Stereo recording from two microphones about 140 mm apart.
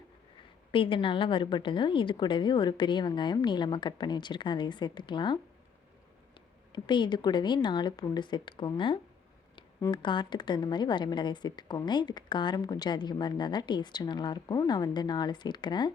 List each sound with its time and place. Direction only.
0.7 s a woman's voice: 40° left (ahead or behind)
6.7 s a woman's voice: 35° left (ahead or behind)